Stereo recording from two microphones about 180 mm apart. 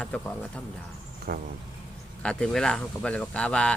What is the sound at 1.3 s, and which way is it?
Speech, 60° right (ahead or behind).